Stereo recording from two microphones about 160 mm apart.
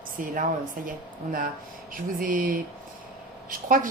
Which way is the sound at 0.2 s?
55° right (ahead or behind).